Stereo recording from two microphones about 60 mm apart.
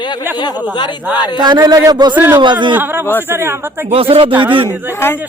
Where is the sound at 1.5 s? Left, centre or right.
Right.